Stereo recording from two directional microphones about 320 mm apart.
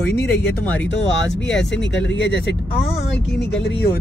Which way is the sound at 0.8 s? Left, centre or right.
Left.